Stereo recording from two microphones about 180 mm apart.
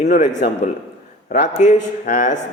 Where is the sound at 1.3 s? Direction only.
45° left (ahead or behind).